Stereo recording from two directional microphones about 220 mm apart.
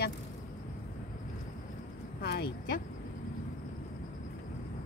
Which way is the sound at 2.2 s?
45° left (ahead or behind).